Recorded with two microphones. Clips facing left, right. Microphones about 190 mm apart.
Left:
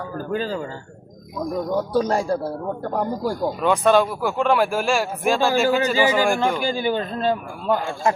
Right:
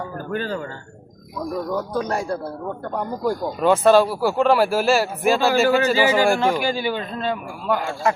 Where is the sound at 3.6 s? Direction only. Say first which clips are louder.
Right 3 dB; 5° right (ahead or behind).